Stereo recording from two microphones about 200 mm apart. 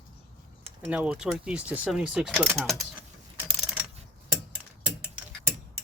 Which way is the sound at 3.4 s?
5° right (ahead or behind).